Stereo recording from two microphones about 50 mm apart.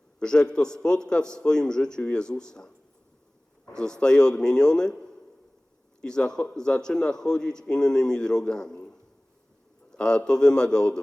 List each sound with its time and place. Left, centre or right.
0.2 s a man's voice: centre
3.8 s a man's voice: centre